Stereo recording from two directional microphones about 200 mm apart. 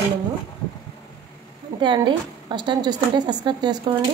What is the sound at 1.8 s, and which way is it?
A woman's voice, 25° right (ahead or behind).